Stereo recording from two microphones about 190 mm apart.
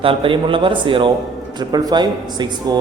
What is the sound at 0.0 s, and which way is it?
Speech, 30° right (ahead or behind).